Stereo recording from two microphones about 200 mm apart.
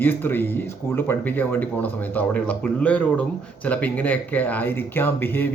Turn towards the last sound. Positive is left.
turn(degrees=10)  # may be behind; listen again after turning